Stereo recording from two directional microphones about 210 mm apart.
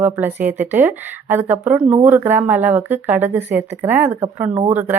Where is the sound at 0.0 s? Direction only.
10° right (ahead or behind).